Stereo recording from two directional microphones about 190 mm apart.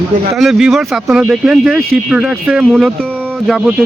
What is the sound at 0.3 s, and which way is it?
Speech, centre (ahead or behind).